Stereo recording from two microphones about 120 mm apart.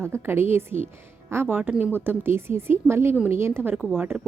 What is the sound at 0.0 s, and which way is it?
A woman's voice, 20° right (ahead or behind).